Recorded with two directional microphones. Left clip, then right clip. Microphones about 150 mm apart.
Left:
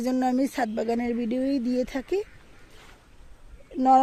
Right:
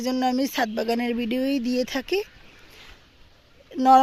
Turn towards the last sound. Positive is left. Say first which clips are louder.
# right 3 dB
turn(degrees=0)  # may be behind; listen again after turning